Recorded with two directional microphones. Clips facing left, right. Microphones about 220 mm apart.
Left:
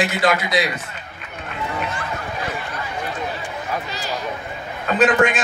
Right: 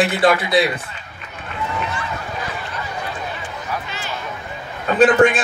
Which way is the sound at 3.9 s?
35° left (ahead or behind).